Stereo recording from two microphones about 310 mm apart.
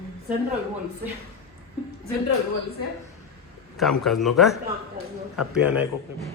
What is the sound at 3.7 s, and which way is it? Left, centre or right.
A man's voice, centre.